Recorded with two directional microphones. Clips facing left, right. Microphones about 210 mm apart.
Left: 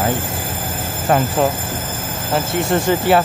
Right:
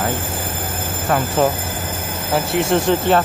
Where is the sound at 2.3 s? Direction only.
Centre (ahead or behind).